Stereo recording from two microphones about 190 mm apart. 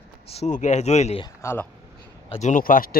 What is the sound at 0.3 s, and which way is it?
Speech, 40° left (ahead or behind).